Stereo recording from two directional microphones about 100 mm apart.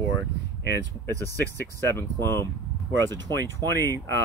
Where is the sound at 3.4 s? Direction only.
35° right (ahead or behind).